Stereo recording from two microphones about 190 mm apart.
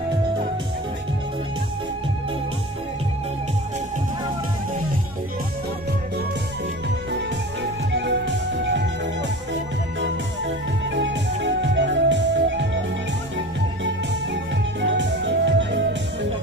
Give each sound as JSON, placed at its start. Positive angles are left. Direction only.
{"t": 7.9, "sound": "music", "side_deg": -65}
{"t": 11.0, "sound": "music", "side_deg": -70}
{"t": 13.8, "sound": "music", "side_deg": -65}